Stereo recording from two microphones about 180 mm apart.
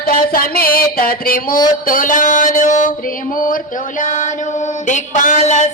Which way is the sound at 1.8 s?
50° left (ahead or behind).